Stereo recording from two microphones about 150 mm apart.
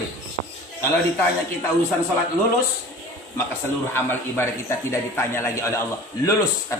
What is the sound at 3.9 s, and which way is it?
A man's voice, 15° left (ahead or behind).